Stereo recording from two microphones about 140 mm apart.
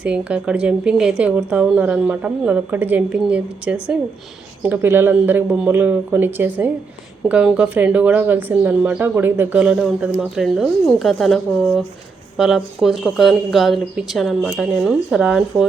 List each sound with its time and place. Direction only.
0.0 s a woman's voice: 10° right (ahead or behind)